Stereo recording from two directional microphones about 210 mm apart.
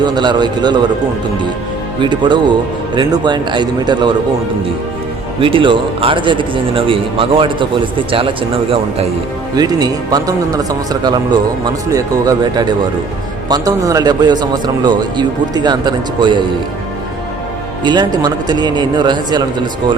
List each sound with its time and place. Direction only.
0.0 s a man's voice: 20° right (ahead or behind)
2.0 s a man's voice: 20° right (ahead or behind)
5.4 s a man's voice: 25° right (ahead or behind)
17.8 s a man's voice: 20° right (ahead or behind)